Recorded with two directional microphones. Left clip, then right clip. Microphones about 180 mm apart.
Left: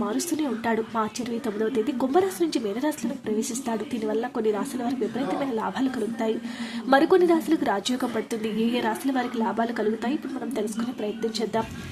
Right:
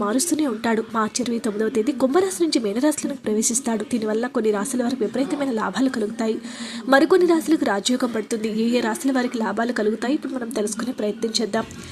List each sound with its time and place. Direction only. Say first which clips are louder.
0.0 s speech: right 5 dB; 25° right (ahead or behind)